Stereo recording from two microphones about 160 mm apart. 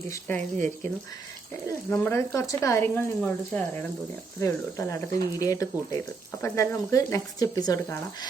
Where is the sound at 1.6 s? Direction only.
15° left (ahead or behind).